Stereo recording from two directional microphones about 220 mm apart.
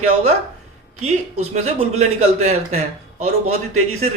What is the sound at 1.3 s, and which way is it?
A man's voice, 30° right (ahead or behind).